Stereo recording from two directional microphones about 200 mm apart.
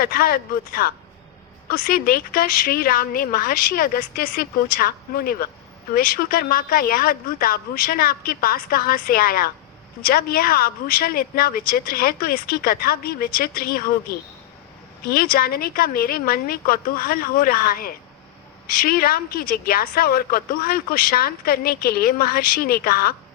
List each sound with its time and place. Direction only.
0.0 s a woman's voice: 45° left (ahead or behind)